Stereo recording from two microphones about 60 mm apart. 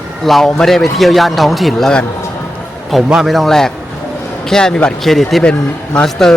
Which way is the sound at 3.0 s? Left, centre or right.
Centre.